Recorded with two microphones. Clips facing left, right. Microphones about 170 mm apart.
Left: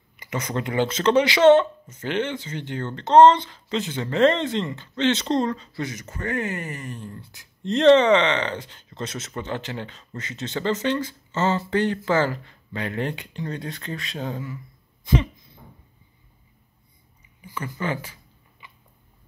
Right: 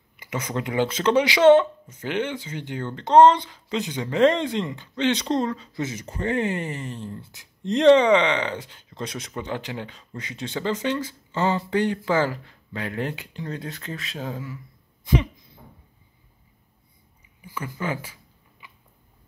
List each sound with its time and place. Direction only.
0.2 s speech: 10° right (ahead or behind)
5.8 s speech: 25° right (ahead or behind); by 14.6 s 5° right (ahead or behind)
17.4 s a sound: 10° right (ahead or behind)